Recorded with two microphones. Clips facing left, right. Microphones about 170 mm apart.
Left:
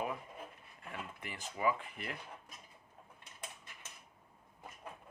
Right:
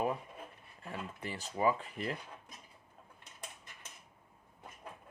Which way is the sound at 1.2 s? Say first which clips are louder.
Right 3 dB; 35° right (ahead or behind).